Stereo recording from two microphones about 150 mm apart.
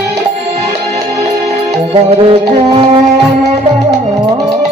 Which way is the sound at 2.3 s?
40° right (ahead or behind).